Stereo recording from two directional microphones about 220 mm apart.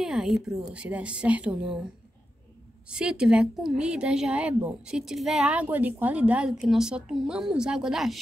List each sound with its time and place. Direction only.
0.0 s speech: centre (ahead or behind)
2.9 s speech: 5° right (ahead or behind)